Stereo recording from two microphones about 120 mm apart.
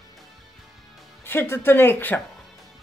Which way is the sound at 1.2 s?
20° left (ahead or behind).